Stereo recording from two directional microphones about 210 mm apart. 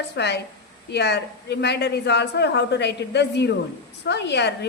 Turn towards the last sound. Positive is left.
turn(degrees=55)  # may be behind; listen again after turning